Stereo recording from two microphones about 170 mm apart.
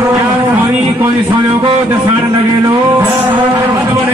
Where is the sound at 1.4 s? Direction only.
25° right (ahead or behind).